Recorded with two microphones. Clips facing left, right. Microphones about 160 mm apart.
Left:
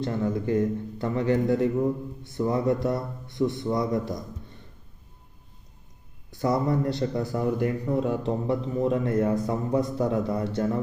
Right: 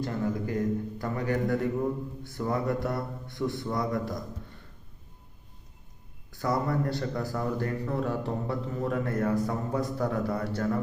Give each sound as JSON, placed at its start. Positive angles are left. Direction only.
{"t": 0.0, "sound": "speech", "side_deg": 25}
{"t": 6.3, "sound": "speech", "side_deg": 20}